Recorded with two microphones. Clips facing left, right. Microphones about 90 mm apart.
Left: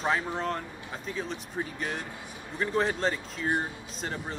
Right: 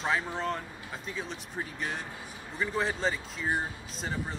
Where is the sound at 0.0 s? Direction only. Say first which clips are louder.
Left 2 dB; centre (ahead or behind).